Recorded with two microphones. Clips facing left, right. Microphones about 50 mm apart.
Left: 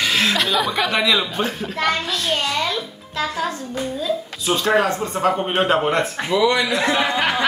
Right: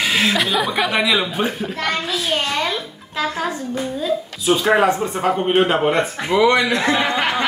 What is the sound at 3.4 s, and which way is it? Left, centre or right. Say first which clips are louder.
Speech: right 1 dB; centre.